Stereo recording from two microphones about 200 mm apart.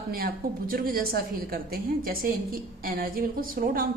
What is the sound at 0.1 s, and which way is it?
A woman's voice, 45° right (ahead or behind).